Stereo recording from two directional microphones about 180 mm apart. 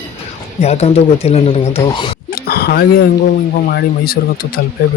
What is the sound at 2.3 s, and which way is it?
Speech, 60° left (ahead or behind).